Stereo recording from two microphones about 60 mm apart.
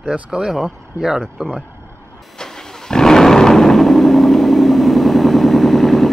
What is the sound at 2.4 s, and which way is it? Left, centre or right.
Vehicle, centre.